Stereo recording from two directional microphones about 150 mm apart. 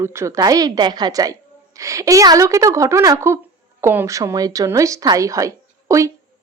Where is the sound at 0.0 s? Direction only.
20° right (ahead or behind).